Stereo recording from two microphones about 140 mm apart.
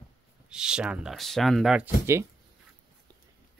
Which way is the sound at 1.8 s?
20° right (ahead or behind).